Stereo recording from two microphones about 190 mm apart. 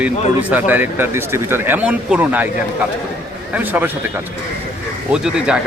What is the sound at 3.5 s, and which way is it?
Speech, 10° right (ahead or behind).